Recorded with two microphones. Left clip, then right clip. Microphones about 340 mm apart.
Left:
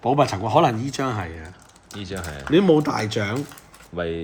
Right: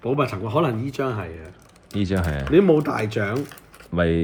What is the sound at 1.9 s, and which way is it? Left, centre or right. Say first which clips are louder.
Speech: right 7 dB; centre.